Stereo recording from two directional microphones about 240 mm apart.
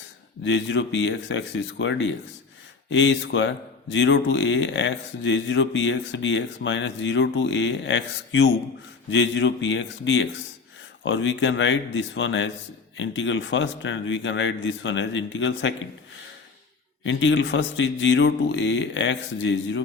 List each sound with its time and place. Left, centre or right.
0.4 s speech: left
17.0 s speech: left